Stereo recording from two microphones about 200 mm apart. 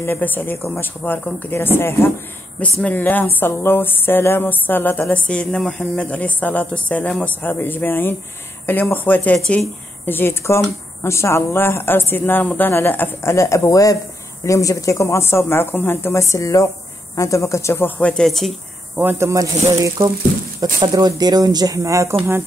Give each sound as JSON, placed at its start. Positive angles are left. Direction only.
{"t": 0.0, "sound": "speech", "side_deg": 10}
{"t": 18.9, "sound": "speech", "side_deg": -10}